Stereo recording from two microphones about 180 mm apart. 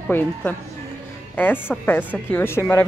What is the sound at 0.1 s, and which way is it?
A woman's voice, 10° left (ahead or behind).